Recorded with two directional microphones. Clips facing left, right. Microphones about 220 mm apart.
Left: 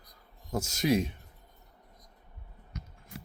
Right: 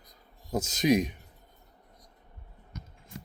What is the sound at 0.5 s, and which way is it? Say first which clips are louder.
Speech: right 3 dB; 20° right (ahead or behind).